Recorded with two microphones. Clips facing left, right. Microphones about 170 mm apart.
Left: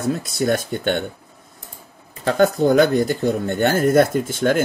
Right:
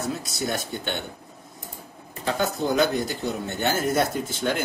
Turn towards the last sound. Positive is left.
turn(degrees=55)  # may be behind; listen again after turning